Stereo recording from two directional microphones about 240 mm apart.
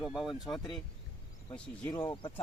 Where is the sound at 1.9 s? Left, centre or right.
Centre.